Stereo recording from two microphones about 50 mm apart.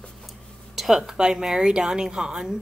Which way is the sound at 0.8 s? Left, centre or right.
Centre.